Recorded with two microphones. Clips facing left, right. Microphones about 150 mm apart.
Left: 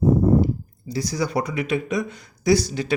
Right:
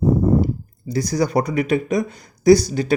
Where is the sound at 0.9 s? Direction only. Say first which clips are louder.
Right 5 dB; 45° right (ahead or behind).